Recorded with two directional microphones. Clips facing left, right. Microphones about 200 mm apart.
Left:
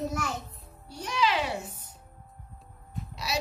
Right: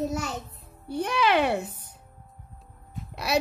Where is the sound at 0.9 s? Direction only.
60° right (ahead or behind).